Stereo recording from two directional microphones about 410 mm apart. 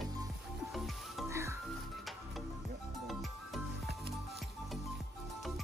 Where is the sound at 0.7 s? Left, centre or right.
Centre.